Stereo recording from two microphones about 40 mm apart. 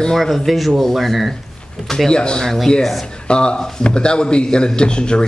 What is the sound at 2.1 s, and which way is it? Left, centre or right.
Speech, left.